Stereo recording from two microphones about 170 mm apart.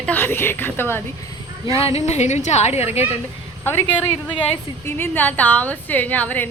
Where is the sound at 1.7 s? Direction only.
35° left (ahead or behind).